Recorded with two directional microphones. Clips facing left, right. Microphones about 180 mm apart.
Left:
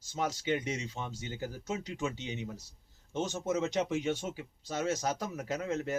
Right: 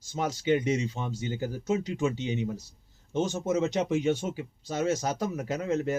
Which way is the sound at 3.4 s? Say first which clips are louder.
Right 2 dB; 25° right (ahead or behind).